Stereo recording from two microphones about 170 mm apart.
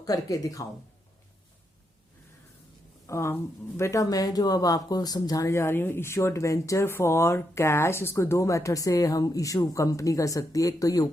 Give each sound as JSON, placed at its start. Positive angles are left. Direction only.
{"t": 0.0, "sound": "speech", "side_deg": 20}
{"t": 3.1, "sound": "speech", "side_deg": 15}